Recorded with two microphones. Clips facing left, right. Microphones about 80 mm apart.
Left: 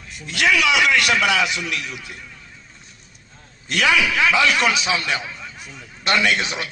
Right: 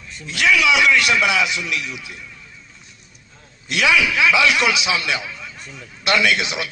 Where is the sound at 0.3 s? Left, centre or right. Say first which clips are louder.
Right 1 dB; left.